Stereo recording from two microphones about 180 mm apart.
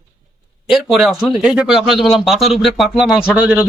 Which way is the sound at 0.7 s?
Centre (ahead or behind).